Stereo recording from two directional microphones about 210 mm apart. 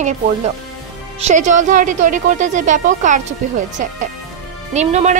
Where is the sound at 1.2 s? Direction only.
35° right (ahead or behind).